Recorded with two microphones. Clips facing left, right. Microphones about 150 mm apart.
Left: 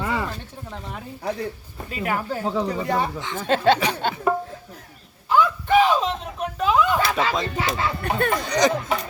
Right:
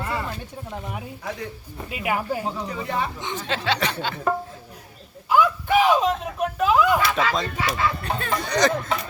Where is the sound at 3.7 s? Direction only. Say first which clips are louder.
Left 2 dB; 10° left (ahead or behind).